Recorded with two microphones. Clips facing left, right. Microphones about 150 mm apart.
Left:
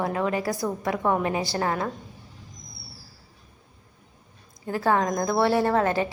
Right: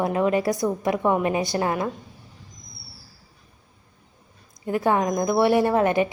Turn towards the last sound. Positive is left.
turn(degrees=-15)  # may be behind; listen again after turning